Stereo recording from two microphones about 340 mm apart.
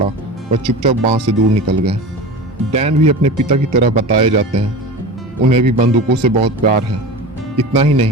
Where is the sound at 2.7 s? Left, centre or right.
Centre.